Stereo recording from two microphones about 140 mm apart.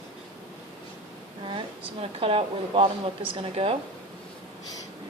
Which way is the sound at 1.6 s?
40° right (ahead or behind).